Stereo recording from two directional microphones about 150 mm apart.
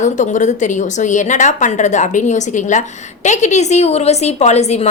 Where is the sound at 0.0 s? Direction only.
55° left (ahead or behind).